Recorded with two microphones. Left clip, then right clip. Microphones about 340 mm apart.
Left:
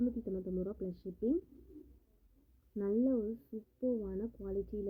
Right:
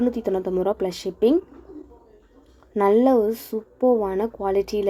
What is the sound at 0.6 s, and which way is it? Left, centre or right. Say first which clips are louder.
Speech: right 19 dB; right.